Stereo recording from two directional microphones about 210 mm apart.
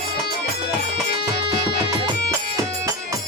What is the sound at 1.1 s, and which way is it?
Music, 50° left (ahead or behind).